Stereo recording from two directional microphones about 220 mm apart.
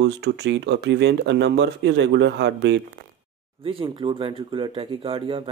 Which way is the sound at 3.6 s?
25° right (ahead or behind).